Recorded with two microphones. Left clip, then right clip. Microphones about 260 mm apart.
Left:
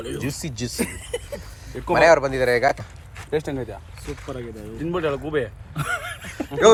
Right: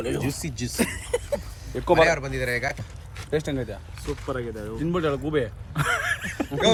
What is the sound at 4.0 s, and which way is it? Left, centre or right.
Speech, centre.